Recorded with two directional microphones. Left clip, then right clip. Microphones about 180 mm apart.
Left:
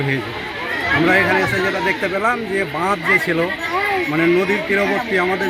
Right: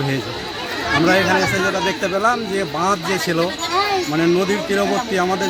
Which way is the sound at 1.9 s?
10° right (ahead or behind).